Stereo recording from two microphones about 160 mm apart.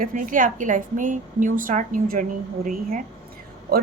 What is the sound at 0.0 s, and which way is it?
A woman's voice, 55° right (ahead or behind).